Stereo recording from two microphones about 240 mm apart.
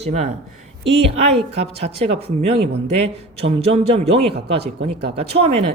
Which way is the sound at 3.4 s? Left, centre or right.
Right.